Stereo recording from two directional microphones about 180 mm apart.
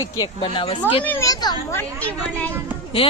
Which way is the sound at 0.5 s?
30° left (ahead or behind).